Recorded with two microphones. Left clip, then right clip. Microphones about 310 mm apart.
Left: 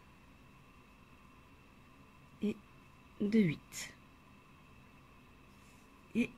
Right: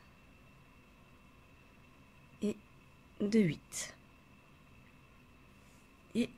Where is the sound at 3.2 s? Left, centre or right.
Centre.